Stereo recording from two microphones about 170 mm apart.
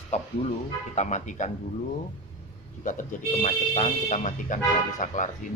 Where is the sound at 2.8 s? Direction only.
50° left (ahead or behind).